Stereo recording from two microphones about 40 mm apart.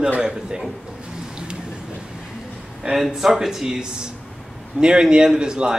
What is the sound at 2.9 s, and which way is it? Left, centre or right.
A man's voice, centre.